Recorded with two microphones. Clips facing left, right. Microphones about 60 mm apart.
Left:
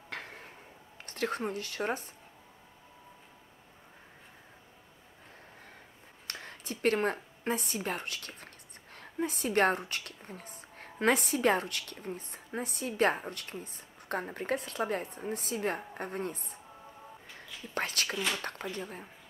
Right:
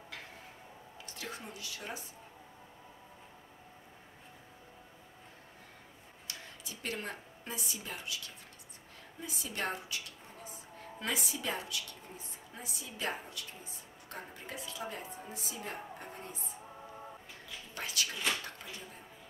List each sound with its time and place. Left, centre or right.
0.1 s tick-tock: left
1.0 s speech: left
6.2 s a woman's voice: left
17.7 s a woman's voice: left
18.1 s speech: centre
18.4 s a woman's voice: left